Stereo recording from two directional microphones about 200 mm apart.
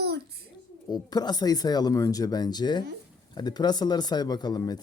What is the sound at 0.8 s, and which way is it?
Speech, 20° left (ahead or behind).